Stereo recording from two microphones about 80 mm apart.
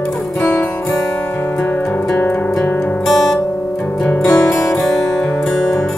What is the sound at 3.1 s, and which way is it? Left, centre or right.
Guitar, centre.